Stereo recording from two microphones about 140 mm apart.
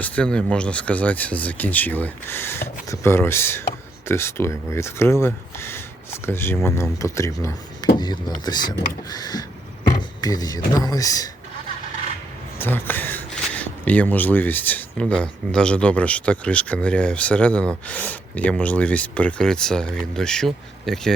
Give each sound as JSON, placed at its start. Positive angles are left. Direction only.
{"t": 0.0, "sound": "speech", "side_deg": 10}
{"t": 9.9, "sound": "a sound", "side_deg": 25}
{"t": 10.8, "sound": "speech", "side_deg": 25}
{"t": 12.5, "sound": "speech", "side_deg": 15}